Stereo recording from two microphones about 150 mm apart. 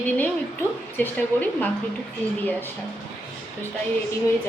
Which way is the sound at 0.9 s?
10° left (ahead or behind).